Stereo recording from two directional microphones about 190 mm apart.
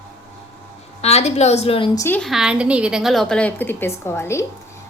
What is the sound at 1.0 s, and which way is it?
A woman's voice, 35° left (ahead or behind).